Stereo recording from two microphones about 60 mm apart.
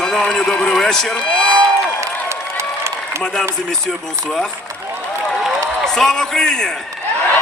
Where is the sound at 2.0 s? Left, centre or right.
Right.